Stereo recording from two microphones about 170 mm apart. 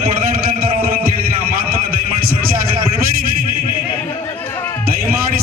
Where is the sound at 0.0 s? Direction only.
60° right (ahead or behind).